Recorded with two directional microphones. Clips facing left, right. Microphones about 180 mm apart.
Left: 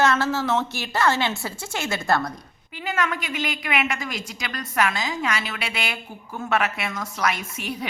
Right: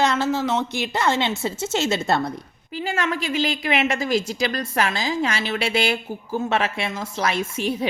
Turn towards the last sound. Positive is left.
turn(degrees=-25)  # may be behind; listen again after turning